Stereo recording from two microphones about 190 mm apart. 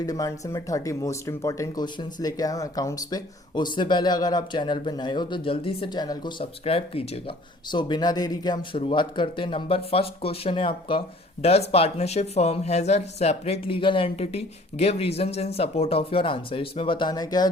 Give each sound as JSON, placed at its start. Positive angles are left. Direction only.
{"t": 0.0, "sound": "speech", "side_deg": 20}